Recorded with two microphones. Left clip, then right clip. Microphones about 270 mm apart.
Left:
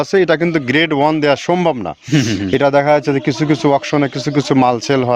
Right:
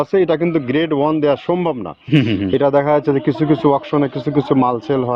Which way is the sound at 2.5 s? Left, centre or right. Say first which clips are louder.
Left 3 dB; left.